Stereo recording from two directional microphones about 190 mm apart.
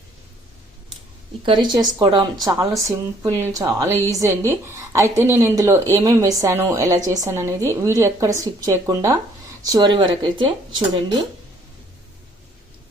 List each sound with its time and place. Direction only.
1.5 s a woman's voice: 25° right (ahead or behind)